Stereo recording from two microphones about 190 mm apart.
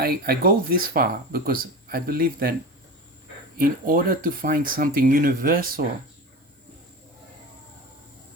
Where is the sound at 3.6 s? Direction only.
50° right (ahead or behind).